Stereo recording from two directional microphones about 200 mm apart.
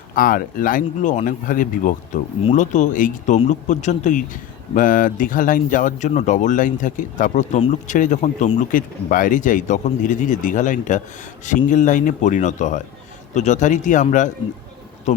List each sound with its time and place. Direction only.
0.1 s speech: 45° left (ahead or behind)